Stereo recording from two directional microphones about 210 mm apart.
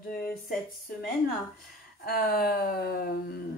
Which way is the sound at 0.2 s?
45° left (ahead or behind).